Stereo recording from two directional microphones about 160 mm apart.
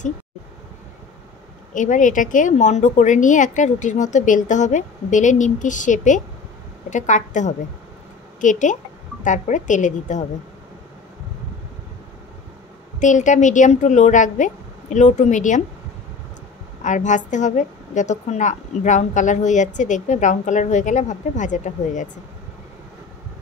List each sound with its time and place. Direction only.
1.7 s a woman's voice: 50° left (ahead or behind)
13.0 s a woman's voice: 50° left (ahead or behind)
16.8 s a woman's voice: 50° left (ahead or behind)